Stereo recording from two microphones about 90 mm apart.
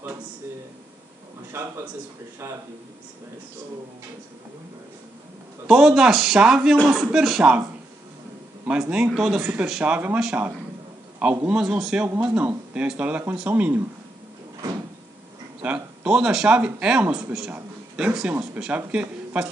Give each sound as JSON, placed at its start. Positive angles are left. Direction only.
{"t": 1.5, "sound": "a man's voice", "side_deg": -25}
{"t": 5.7, "sound": "speech", "side_deg": -5}
{"t": 8.9, "sound": "speech", "side_deg": -10}
{"t": 9.9, "sound": "speech", "side_deg": -20}
{"t": 15.6, "sound": "speech", "side_deg": -15}